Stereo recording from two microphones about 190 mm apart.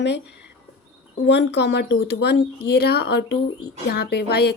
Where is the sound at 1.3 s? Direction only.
60° left (ahead or behind).